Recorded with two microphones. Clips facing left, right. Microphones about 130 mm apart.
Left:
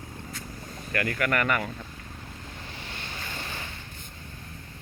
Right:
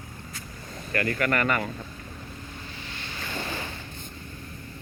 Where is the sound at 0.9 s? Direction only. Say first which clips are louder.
Right 1 dB; 5° left (ahead or behind).